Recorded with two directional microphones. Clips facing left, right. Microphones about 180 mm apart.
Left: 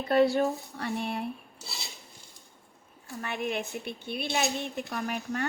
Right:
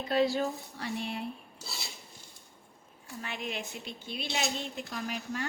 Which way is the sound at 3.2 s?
55° left (ahead or behind).